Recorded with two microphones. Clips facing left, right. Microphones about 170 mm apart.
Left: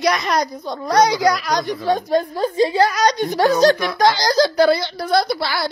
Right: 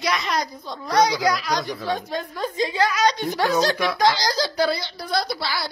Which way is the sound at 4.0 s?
50° left (ahead or behind).